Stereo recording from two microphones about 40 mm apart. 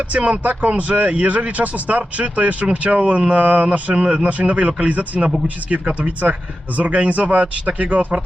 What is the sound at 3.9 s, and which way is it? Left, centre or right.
Speech, right.